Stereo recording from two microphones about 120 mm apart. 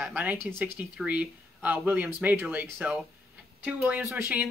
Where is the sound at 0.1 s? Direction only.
15° right (ahead or behind).